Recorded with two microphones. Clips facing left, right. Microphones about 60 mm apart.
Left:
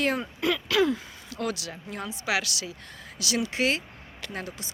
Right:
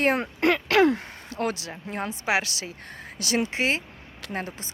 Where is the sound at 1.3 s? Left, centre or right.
Right.